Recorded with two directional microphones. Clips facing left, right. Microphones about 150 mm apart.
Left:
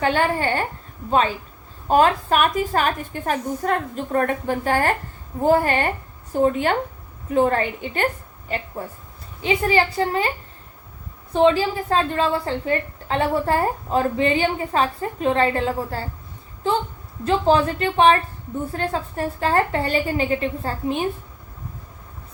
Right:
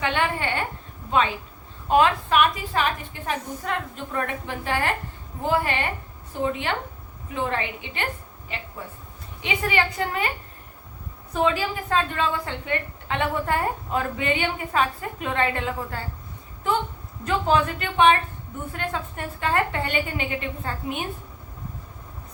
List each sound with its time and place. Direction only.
0.0 s a woman's voice: 40° left (ahead or behind)
1.9 s a woman's voice: 40° left (ahead or behind)
11.3 s a woman's voice: 30° left (ahead or behind)